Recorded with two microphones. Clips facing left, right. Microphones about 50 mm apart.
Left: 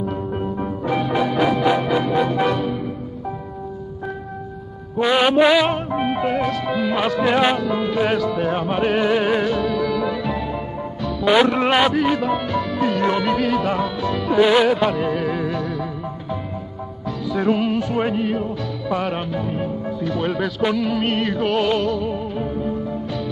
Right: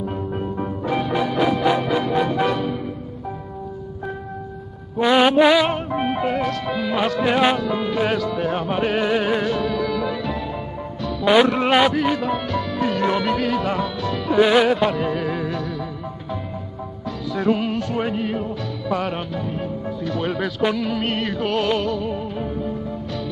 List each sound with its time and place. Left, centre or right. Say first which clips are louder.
0.0 s music: left 2 dB; centre
1.7 s music: left 1 dB; left
2.0 s music: left 1 dB; centre
5.0 s music: right 1 dB; centre
17.3 s music: left 2 dB; centre
19.0 s speech: left 2 dB; centre